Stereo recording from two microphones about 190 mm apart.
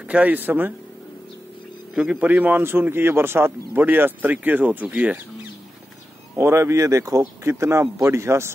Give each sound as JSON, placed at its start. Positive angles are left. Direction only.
{"t": 0.1, "sound": "speech", "side_deg": -10}
{"t": 2.0, "sound": "speech", "side_deg": -5}